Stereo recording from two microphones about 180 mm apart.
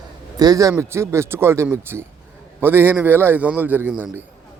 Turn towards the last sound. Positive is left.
turn(degrees=-10)  # may be behind; listen again after turning